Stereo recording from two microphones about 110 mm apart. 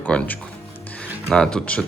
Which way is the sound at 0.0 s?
10° left (ahead or behind).